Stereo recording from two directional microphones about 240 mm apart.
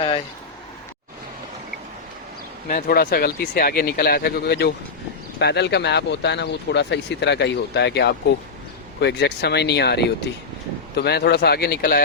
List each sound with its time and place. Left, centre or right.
2.6 s speech: left